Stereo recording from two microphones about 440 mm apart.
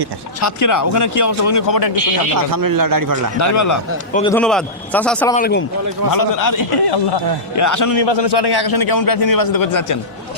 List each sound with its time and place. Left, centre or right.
0.4 s speech: left
2.5 s a man's voice: right
3.3 s speech: left
4.1 s a man's voice: centre
5.4 s speech: left
6.1 s a man's voice: left
8.0 s a man's voice: left